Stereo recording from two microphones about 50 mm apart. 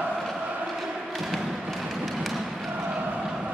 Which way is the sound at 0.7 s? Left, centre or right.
Centre.